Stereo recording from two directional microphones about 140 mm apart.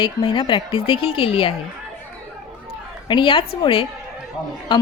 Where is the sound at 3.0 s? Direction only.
35° left (ahead or behind).